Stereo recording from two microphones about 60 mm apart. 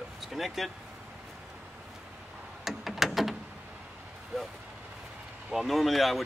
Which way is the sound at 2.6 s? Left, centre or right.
Centre.